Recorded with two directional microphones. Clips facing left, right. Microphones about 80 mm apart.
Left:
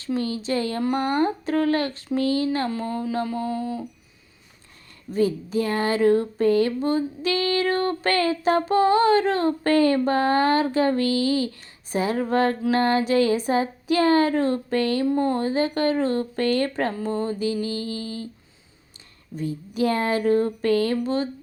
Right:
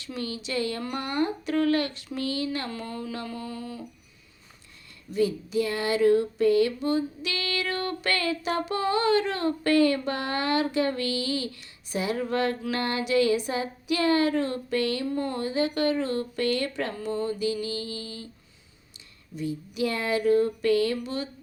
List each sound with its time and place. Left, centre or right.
0.0 s speech: left
5.1 s speech: left
19.4 s speech: left